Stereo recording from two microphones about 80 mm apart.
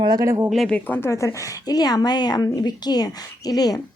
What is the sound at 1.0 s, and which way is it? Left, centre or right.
Speech, left.